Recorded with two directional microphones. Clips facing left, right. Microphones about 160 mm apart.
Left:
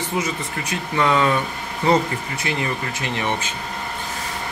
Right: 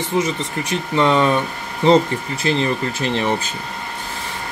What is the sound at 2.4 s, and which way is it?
Speech, 30° right (ahead or behind).